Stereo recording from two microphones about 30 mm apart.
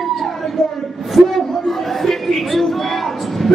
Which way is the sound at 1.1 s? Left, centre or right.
Centre.